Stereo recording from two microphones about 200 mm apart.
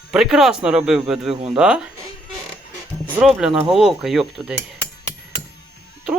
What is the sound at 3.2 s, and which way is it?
Speech, 5° right (ahead or behind).